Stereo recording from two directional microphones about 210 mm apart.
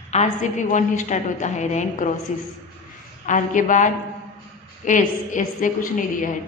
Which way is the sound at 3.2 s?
35° left (ahead or behind).